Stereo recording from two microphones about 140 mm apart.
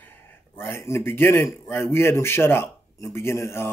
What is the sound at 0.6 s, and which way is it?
A man's voice, 15° left (ahead or behind).